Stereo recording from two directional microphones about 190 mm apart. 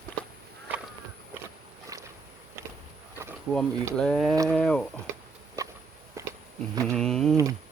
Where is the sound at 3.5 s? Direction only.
5° left (ahead or behind).